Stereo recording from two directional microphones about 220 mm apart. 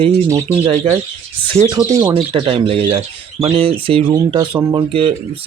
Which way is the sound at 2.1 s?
25° right (ahead or behind).